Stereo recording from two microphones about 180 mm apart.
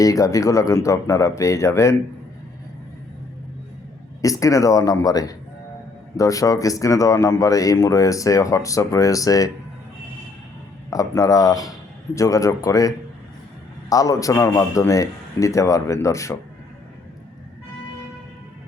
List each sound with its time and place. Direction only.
0.0 s a man's voice: 20° left (ahead or behind)
4.2 s speech: 20° left (ahead or behind)
10.8 s a man's voice: 20° left (ahead or behind)
13.9 s a man's voice: 20° left (ahead or behind)